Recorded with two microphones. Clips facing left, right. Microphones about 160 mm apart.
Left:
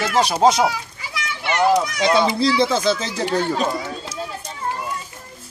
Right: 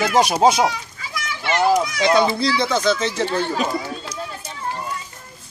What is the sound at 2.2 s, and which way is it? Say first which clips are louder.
Speech: left 2 dB; 25° left (ahead or behind).